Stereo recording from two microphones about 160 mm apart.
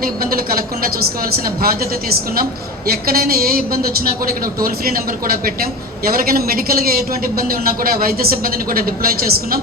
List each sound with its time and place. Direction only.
0.0 s a woman's voice: 65° right (ahead or behind)